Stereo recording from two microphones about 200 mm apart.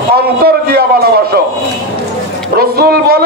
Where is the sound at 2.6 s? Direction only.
50° right (ahead or behind).